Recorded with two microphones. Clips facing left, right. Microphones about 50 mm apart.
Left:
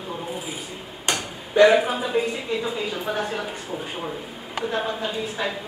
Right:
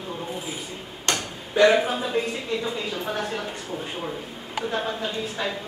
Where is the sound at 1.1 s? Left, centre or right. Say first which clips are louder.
Even; centre.